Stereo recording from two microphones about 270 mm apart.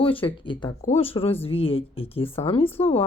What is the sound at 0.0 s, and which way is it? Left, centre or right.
A woman's voice, centre.